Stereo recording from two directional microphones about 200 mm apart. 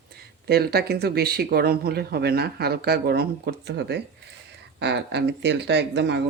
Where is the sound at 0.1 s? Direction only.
50° right (ahead or behind).